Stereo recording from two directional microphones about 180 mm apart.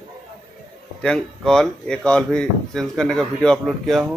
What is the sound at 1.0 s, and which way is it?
Speech, 5° left (ahead or behind).